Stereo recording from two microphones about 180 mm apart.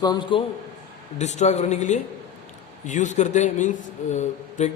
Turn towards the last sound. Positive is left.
turn(degrees=40)  # may be behind; listen again after turning